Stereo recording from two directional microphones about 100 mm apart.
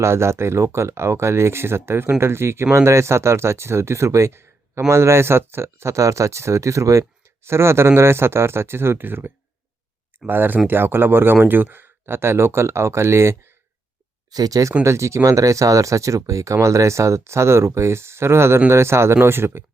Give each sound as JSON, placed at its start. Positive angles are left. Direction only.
{"t": 0.0, "sound": "speech", "side_deg": -25}
{"t": 14.3, "sound": "speech", "side_deg": -40}